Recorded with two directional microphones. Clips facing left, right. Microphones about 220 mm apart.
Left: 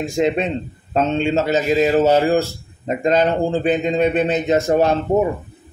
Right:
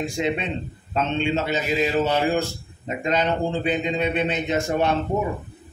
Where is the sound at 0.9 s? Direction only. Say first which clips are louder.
Left 5 dB; 40° left (ahead or behind).